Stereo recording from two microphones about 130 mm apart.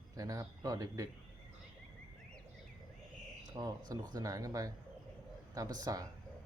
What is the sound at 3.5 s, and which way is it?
Speech, 30° right (ahead or behind).